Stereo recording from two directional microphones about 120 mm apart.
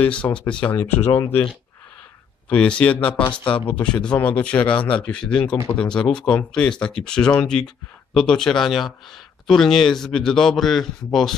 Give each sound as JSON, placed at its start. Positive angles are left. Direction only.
{"t": 0.0, "sound": "speech", "side_deg": 10}
{"t": 2.5, "sound": "a man's voice", "side_deg": 10}